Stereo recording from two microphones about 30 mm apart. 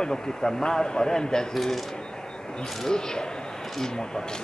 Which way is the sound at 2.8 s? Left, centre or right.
Left.